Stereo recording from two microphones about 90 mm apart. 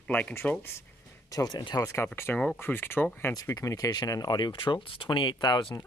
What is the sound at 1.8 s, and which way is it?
Speech, 30° left (ahead or behind).